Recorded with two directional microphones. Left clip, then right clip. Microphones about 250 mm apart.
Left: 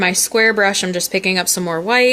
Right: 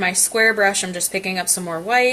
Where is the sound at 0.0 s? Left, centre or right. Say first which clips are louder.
Left 3 dB; left.